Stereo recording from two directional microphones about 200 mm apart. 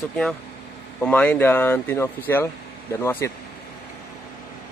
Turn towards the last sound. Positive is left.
turn(degrees=15)  # may be behind; listen again after turning